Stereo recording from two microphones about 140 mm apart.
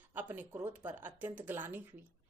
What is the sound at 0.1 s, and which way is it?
Speech, 15° right (ahead or behind).